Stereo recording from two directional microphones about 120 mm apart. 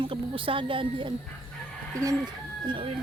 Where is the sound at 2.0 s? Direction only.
30° right (ahead or behind).